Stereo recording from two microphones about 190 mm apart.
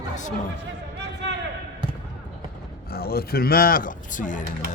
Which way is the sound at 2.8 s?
55° left (ahead or behind).